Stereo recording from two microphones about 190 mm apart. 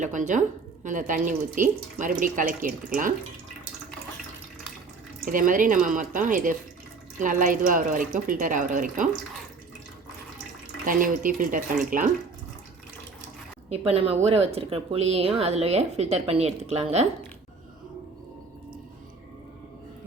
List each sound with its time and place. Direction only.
0.0 s a woman's voice: 40° right (ahead or behind)
5.2 s speech: 45° right (ahead or behind)
10.8 s speech: 45° right (ahead or behind)
13.7 s a woman's voice: 30° right (ahead or behind)